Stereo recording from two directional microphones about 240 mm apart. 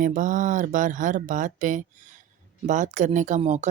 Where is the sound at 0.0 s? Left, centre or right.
Right.